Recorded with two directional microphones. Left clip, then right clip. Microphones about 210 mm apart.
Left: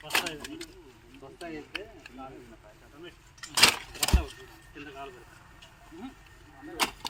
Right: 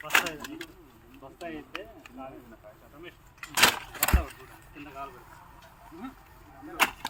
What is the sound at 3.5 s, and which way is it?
Speech, centre (ahead or behind).